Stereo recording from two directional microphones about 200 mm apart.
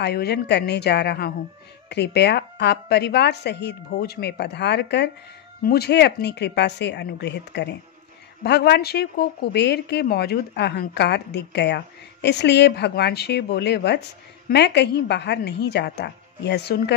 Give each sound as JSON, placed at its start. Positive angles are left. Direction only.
{"t": 0.0, "sound": "speech", "side_deg": 55}